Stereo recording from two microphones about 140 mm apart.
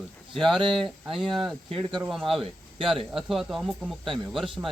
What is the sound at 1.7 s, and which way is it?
Speech, 35° right (ahead or behind).